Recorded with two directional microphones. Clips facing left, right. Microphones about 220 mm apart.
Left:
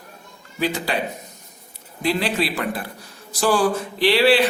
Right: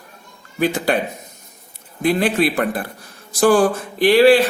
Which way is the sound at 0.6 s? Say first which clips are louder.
Right 5 dB; 50° right (ahead or behind).